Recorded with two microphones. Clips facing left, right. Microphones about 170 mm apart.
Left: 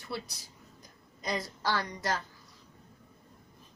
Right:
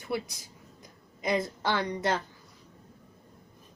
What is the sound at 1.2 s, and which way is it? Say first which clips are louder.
A woman's voice: right 5 dB; 25° right (ahead or behind).